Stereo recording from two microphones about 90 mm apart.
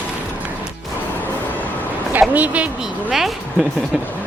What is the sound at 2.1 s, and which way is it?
Speech, 20° right (ahead or behind).